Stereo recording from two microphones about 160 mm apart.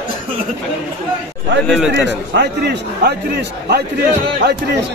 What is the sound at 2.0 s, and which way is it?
A man's voice, 90° right.